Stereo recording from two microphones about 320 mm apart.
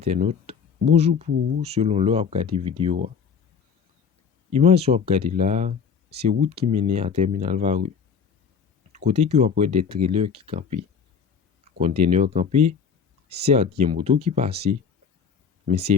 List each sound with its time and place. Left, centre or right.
0.0 s speech: right
4.5 s speech: centre
8.9 s speech: right
11.8 s speech: centre